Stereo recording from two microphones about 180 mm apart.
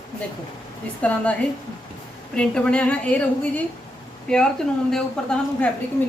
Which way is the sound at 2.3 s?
5° left (ahead or behind).